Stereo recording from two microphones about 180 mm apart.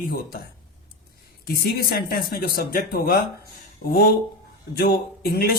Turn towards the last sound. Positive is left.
turn(degrees=55)  # may be behind; listen again after turning